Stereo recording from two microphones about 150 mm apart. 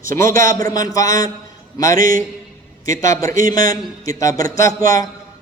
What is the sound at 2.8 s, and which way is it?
A man's voice, 20° left (ahead or behind).